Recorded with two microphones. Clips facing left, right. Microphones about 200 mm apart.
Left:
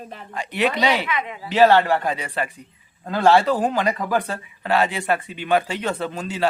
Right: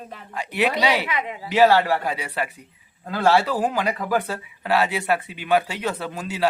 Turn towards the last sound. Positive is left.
turn(degrees=-10)  # may be behind; listen again after turning